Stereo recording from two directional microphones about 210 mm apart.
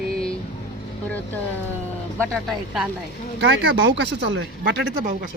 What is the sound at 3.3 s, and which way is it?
Speech, 55° right (ahead or behind).